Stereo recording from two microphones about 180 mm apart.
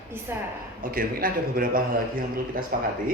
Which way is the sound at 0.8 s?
55° right (ahead or behind).